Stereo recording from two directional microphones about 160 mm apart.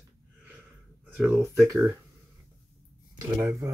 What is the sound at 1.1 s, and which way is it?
Speech, 10° right (ahead or behind).